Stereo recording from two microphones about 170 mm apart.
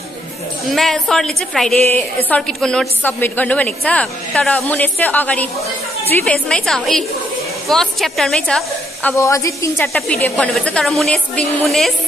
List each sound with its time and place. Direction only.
0.7 s a woman's voice: centre (ahead or behind)
9.1 s a woman's voice: 20° left (ahead or behind)
9.9 s speech: 5° left (ahead or behind)